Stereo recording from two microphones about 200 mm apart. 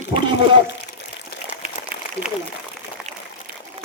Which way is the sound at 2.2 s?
5° right (ahead or behind).